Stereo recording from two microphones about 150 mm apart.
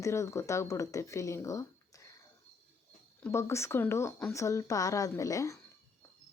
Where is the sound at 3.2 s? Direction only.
20° left (ahead or behind).